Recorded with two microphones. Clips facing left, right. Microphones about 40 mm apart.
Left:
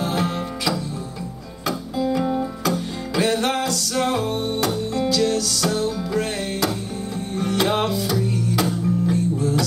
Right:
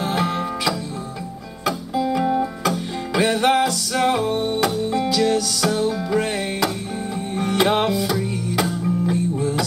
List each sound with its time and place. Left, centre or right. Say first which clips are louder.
0.0 s music: right 2 dB; centre
2.0 s music: right 2 dB; centre